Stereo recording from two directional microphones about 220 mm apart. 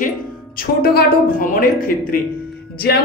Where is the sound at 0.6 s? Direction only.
45° left (ahead or behind).